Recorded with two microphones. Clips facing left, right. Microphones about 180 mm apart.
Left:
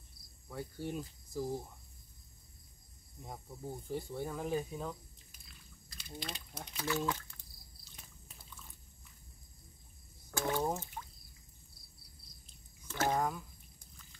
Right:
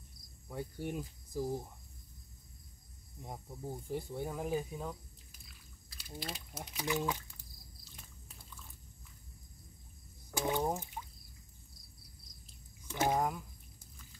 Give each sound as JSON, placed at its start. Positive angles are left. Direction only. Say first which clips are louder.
{"t": 0.2, "sound": "cricket", "louder": "right 3 dB", "side_deg": 30}
{"t": 0.5, "sound": "speech", "louder": "right 1 dB", "side_deg": -15}
{"t": 3.2, "sound": "speech", "louder": "right 1 dB", "side_deg": -15}
{"t": 6.8, "sound": "speech", "louder": "even", "side_deg": -15}
{"t": 7.8, "sound": "a sound", "louder": "left 1 dB", "side_deg": 0}
{"t": 10.3, "sound": "speech", "louder": "right 1 dB", "side_deg": -15}
{"t": 12.8, "sound": "speech", "louder": "right 1 dB", "side_deg": -15}